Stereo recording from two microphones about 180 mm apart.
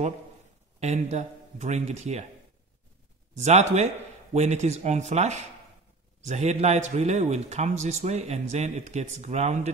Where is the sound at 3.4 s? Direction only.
40° right (ahead or behind).